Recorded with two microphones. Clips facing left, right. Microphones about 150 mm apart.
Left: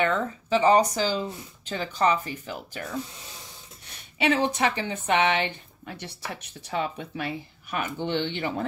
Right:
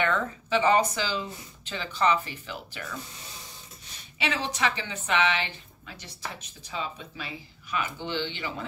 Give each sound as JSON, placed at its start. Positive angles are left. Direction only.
{"t": 0.0, "sound": "speech", "side_deg": 35}
{"t": 4.2, "sound": "speech", "side_deg": 50}